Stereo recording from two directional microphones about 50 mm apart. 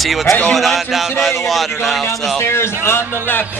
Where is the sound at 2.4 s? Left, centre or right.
Left.